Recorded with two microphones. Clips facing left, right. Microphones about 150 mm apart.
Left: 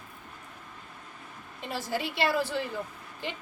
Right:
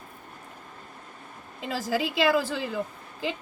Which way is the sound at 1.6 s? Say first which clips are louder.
Right 4 dB; 90° right.